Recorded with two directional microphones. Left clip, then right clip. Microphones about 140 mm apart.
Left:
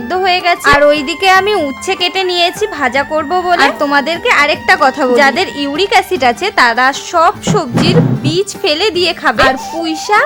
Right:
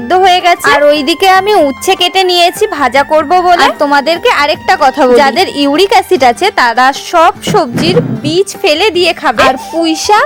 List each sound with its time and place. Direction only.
0.1 s a woman's voice: 40° right (ahead or behind)
0.6 s a woman's voice: 50° right (ahead or behind); by 9.5 s 35° right (ahead or behind)
9.8 s a child's voice: 65° right (ahead or behind)